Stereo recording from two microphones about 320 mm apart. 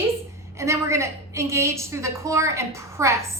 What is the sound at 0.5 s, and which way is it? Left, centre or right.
A woman's voice, centre.